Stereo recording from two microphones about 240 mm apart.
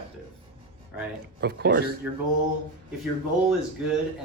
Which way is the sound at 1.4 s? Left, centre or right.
Right.